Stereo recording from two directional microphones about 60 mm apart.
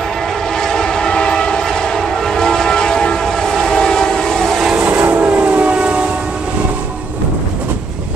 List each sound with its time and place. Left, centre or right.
0.6 s train: centre
4.8 s train: right